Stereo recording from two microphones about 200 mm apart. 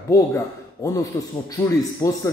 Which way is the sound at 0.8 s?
15° left (ahead or behind).